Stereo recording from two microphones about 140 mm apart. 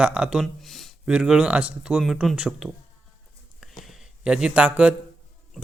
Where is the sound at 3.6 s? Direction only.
Centre (ahead or behind).